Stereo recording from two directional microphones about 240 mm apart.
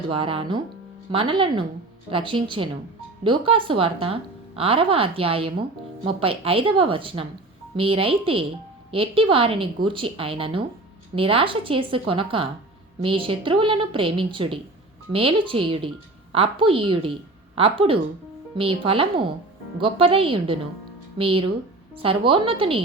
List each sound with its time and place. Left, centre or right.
0.1 s a woman's voice: right